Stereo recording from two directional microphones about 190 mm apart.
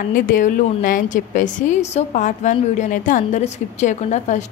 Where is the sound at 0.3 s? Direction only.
45° left (ahead or behind).